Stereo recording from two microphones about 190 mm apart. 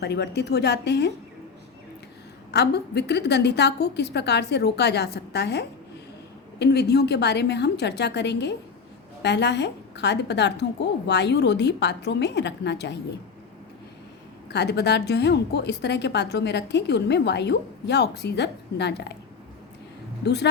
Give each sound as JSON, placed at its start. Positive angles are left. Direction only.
{"t": 0.0, "sound": "a woman's voice", "side_deg": 60}
{"t": 2.5, "sound": "a woman's voice", "side_deg": 60}
{"t": 14.5, "sound": "a woman's voice", "side_deg": 60}
{"t": 20.2, "sound": "a woman's voice", "side_deg": 60}